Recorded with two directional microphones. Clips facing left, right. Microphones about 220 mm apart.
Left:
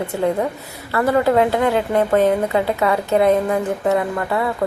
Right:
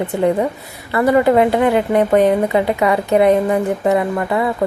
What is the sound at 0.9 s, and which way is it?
A woman's voice, 10° right (ahead or behind).